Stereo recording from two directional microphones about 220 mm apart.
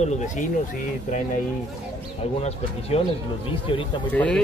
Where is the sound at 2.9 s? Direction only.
25° left (ahead or behind).